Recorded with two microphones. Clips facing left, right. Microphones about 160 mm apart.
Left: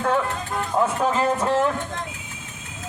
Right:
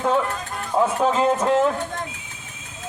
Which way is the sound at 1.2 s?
15° right (ahead or behind).